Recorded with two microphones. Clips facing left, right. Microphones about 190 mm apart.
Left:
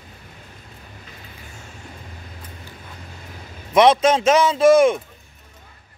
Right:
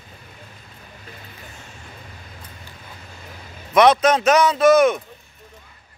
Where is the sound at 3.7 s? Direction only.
25° left (ahead or behind).